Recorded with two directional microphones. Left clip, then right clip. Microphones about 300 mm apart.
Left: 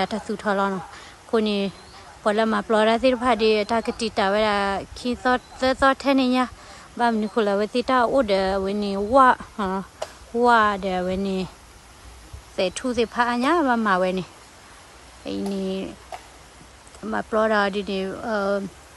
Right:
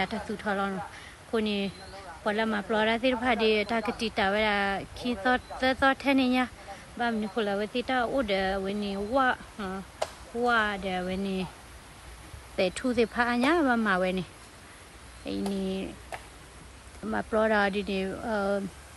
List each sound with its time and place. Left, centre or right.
0.0 s speech: centre
10.0 s a sound: right
10.4 s speech: centre
12.5 s speech: centre
15.2 s speech: centre
16.1 s a sound: centre
17.1 s speech: centre